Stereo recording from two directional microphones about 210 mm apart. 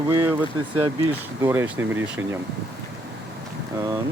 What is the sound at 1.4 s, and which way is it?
Speech, 10° right (ahead or behind).